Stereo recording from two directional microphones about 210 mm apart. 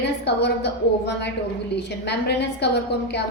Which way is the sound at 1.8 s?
55° left (ahead or behind).